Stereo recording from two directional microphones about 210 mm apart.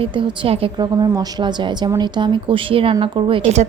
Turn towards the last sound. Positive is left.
turn(degrees=-30)  # may be behind; listen again after turning